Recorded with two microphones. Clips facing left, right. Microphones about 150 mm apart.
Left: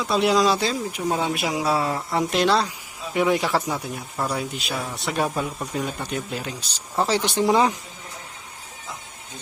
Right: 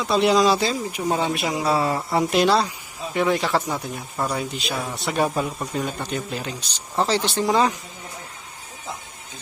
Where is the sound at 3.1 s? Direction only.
10° left (ahead or behind).